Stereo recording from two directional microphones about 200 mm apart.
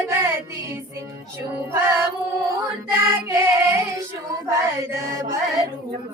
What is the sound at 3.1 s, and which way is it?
Music, 10° right (ahead or behind).